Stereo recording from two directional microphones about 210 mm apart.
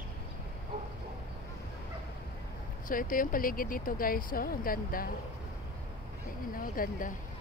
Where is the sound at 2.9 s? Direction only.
40° left (ahead or behind).